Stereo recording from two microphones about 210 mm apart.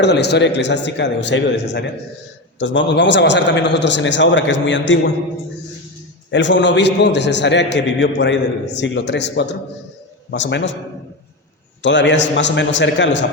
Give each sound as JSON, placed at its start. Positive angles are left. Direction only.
{"t": 0.0, "sound": "a man's voice", "side_deg": 55}
{"t": 6.3, "sound": "a man's voice", "side_deg": 60}
{"t": 11.8, "sound": "a man's voice", "side_deg": 60}